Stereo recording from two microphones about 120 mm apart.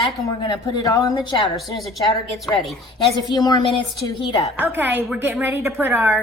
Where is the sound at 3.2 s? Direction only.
35° left (ahead or behind).